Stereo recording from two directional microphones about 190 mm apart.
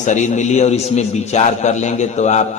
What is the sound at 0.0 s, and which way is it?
A man's voice, 40° left (ahead or behind).